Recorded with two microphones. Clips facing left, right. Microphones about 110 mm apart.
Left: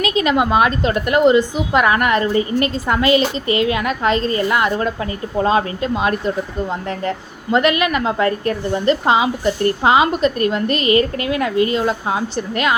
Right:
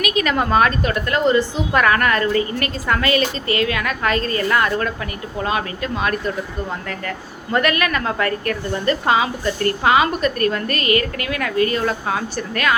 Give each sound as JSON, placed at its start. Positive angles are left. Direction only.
{"t": 0.0, "sound": "a woman's voice", "side_deg": 25}
{"t": 0.3, "sound": "a woman's voice", "side_deg": 15}
{"t": 7.5, "sound": "a woman's voice", "side_deg": 20}